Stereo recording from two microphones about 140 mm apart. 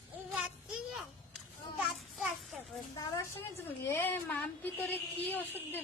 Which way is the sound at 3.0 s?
25° left (ahead or behind).